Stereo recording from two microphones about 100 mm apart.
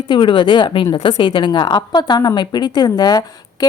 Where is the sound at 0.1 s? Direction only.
55° left (ahead or behind).